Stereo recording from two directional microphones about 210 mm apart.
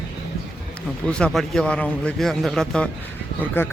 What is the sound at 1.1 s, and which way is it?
Speech, 5° left (ahead or behind).